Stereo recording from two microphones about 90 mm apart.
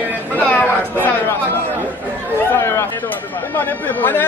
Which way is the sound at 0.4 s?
15° left (ahead or behind).